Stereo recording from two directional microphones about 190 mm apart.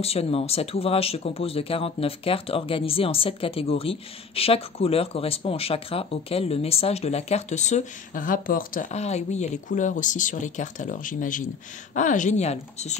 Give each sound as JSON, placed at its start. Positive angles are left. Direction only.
{"t": 0.0, "sound": "speech", "side_deg": 30}